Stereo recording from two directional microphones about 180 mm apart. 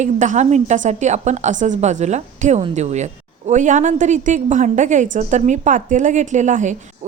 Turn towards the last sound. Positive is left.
turn(degrees=-40)  # may be behind; listen again after turning